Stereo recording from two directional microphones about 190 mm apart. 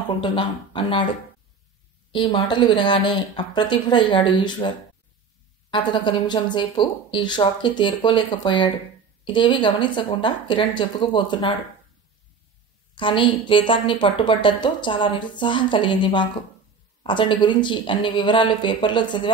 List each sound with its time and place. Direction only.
0.2 s a woman's voice: 25° left (ahead or behind)
2.1 s a woman's voice: 25° left (ahead or behind)
5.7 s a woman's voice: 25° left (ahead or behind)
12.9 s a woman's voice: 25° left (ahead or behind)